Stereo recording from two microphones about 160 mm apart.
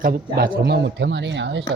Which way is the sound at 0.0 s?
65° right (ahead or behind).